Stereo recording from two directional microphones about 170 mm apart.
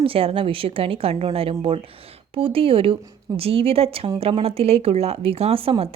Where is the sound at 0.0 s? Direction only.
35° right (ahead or behind).